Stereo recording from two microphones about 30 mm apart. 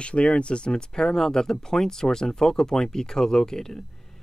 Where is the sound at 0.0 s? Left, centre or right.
Left.